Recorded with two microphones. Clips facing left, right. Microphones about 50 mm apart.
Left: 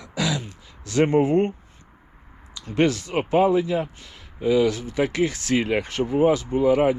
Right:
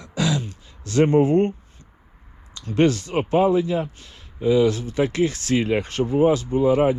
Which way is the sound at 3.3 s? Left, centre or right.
Left.